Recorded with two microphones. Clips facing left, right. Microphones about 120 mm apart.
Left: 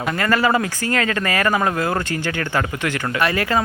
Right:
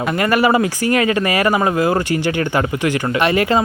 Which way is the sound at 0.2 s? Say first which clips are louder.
Right 4 dB; 15° right (ahead or behind).